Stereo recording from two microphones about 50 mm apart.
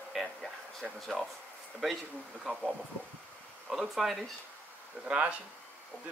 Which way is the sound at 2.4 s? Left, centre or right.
Centre.